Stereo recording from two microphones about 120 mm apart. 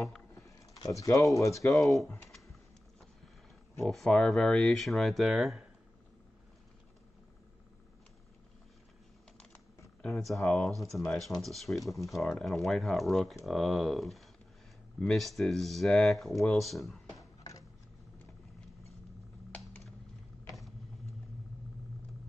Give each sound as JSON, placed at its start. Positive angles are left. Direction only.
{"t": 0.3, "sound": "speech", "side_deg": 30}
{"t": 1.8, "sound": "speech", "side_deg": 0}
{"t": 3.8, "sound": "speech", "side_deg": 5}
{"t": 10.0, "sound": "speech", "side_deg": 0}
{"t": 17.2, "sound": "a sound", "side_deg": 30}